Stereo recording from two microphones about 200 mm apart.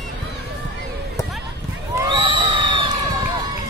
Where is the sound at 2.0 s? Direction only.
25° right (ahead or behind).